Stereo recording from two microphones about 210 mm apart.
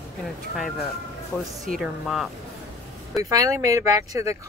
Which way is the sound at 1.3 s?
10° left (ahead or behind).